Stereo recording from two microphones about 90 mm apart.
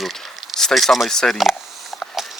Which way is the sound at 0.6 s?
Centre (ahead or behind).